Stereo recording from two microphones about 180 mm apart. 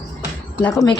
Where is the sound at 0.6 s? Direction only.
20° left (ahead or behind).